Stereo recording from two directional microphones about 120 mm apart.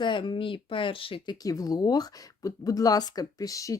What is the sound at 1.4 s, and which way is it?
Speech, 30° left (ahead or behind).